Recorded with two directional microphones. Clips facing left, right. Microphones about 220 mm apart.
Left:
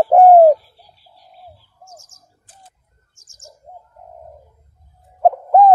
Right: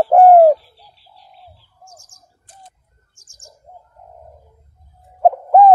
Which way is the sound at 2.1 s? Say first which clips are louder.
Right 3 dB; 15° right (ahead or behind).